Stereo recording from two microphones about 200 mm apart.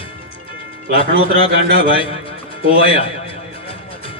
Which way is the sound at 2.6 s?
25° left (ahead or behind).